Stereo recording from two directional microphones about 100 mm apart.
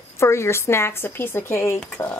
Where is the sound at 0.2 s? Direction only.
25° left (ahead or behind).